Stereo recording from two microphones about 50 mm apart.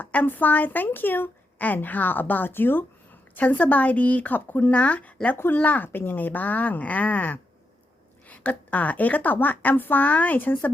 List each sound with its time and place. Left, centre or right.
0.0 s a woman's voice: left
3.3 s a woman's voice: left
4.7 s a woman's voice: left